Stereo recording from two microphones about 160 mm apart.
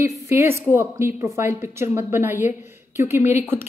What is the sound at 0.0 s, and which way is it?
A woman's voice, 15° right (ahead or behind).